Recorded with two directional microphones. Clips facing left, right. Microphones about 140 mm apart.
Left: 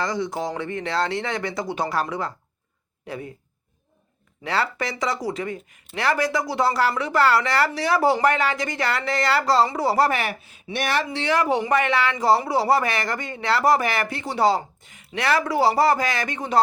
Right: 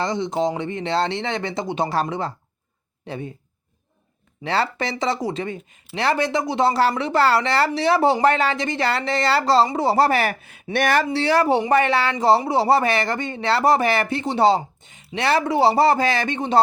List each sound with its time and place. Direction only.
0.0 s speech: 25° right (ahead or behind)
4.4 s speech: 30° right (ahead or behind)
10.4 s speech: 55° right (ahead or behind)
11.1 s speech: 35° right (ahead or behind)